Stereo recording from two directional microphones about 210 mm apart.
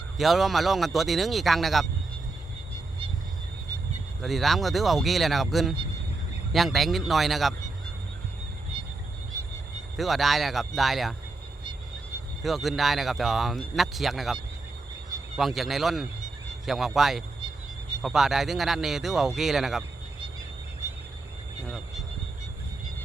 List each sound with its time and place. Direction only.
0.2 s speech: centre (ahead or behind)
4.2 s speech: centre (ahead or behind)
10.0 s speech: centre (ahead or behind)
12.4 s speech: centre (ahead or behind)
15.4 s speech: centre (ahead or behind)